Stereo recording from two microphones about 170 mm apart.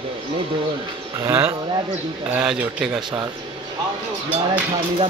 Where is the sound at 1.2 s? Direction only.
15° right (ahead or behind).